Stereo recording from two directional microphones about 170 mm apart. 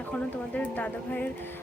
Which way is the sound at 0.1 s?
10° left (ahead or behind).